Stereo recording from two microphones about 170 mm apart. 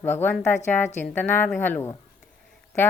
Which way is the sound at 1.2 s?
10° left (ahead or behind).